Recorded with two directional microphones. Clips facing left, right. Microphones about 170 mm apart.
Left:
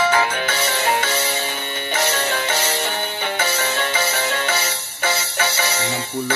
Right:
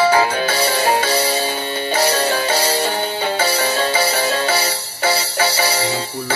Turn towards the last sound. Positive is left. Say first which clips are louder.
# right 4 dB
turn(degrees=-35)  # may be behind; listen again after turning